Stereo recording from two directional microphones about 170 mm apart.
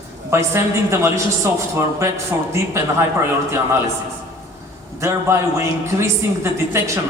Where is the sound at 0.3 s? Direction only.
15° right (ahead or behind).